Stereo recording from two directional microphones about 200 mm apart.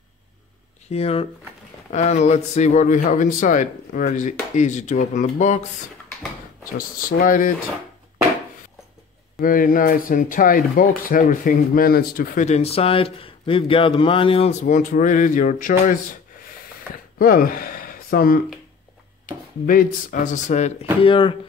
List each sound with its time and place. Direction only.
0.8 s speech: 30° left (ahead or behind)
6.8 s speech: 45° left (ahead or behind)
9.4 s speech: 45° left (ahead or behind)
17.2 s speech: 45° left (ahead or behind)
19.6 s speech: 45° left (ahead or behind)
21.0 s speech: 25° left (ahead or behind)